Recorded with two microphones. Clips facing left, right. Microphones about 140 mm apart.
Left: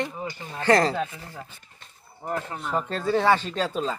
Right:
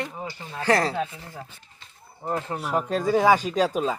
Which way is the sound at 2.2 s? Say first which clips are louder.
Right 2 dB; 25° right (ahead or behind).